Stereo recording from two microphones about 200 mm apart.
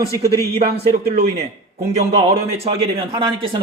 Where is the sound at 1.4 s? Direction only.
30° right (ahead or behind).